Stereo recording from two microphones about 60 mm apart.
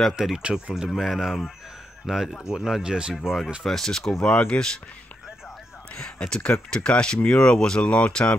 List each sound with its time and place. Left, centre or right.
0.1 s speech: centre
0.4 s speech: centre
0.9 s speech: centre
3.2 s speech: centre
4.5 s speech: left
5.9 s speech: centre